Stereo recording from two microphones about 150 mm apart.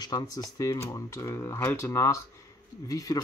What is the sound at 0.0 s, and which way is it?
Speech, 25° left (ahead or behind).